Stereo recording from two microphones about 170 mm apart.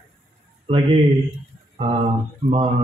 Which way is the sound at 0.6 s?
35° right (ahead or behind).